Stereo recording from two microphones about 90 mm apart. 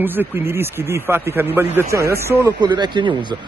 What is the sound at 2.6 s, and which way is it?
Speech, 55° right (ahead or behind).